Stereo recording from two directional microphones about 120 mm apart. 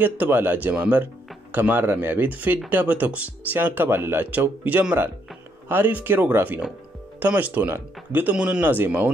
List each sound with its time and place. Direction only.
0.0 s speech: 15° right (ahead or behind)